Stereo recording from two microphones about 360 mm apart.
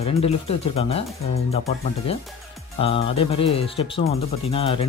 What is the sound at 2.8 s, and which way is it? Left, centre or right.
Speech, centre.